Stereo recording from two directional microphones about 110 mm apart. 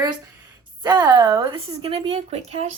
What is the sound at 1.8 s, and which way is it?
Speech, 60° right (ahead or behind).